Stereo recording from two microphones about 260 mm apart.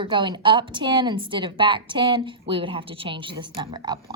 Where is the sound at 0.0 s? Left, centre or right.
Centre.